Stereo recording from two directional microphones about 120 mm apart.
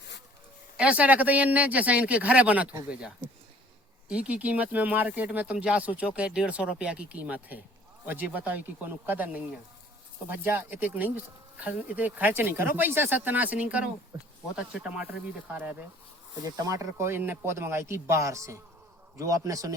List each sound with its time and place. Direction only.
0.8 s speech: 10° right (ahead or behind)
4.1 s speech: 10° right (ahead or behind)
16.5 s speech: 30° right (ahead or behind)